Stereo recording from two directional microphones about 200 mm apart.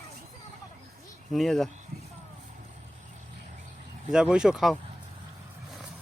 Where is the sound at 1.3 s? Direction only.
Centre (ahead or behind).